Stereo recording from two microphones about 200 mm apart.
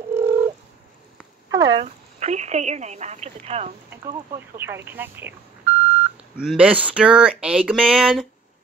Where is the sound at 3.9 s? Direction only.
15° right (ahead or behind).